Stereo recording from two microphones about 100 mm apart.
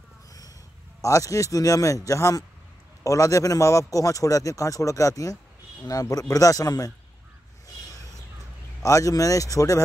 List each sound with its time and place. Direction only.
0.3 s a sound: 35° left (ahead or behind)
1.0 s a man's voice: 35° left (ahead or behind)
8.8 s a man's voice: 35° left (ahead or behind)